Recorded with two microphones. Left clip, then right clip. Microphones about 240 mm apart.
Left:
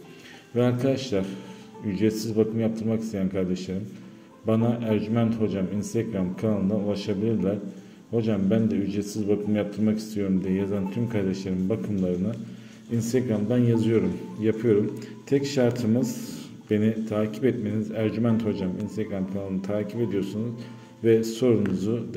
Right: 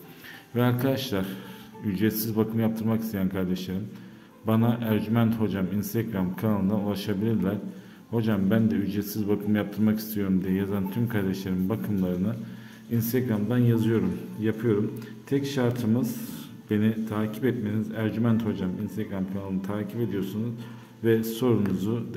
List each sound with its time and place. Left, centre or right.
0.6 s a man's voice: centre